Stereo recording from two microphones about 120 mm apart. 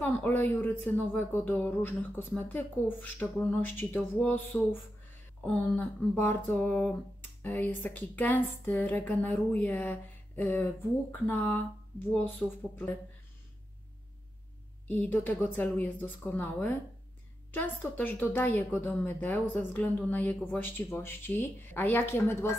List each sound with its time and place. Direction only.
0.0 s speech: 20° left (ahead or behind)
15.0 s speech: 15° left (ahead or behind)